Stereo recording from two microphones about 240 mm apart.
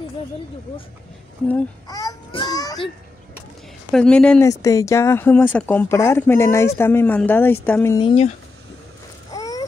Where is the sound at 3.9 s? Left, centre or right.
Centre; by 8.3 s left.